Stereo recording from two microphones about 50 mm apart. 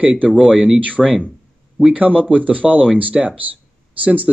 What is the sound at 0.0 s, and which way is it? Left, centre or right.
Speech, right.